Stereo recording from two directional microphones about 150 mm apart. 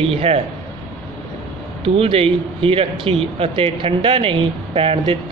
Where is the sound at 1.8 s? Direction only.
40° right (ahead or behind).